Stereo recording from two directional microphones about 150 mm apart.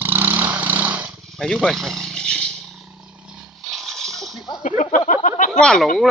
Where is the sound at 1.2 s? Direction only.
Centre (ahead or behind).